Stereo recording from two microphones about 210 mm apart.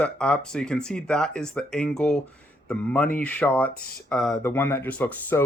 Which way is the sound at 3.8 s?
45° left (ahead or behind).